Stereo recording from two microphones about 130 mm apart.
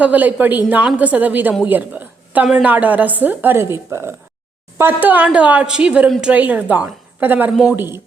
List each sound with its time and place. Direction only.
0.0 s a woman's voice: 10° right (ahead or behind)